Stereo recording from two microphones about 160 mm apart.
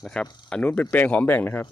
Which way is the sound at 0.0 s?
5° left (ahead or behind).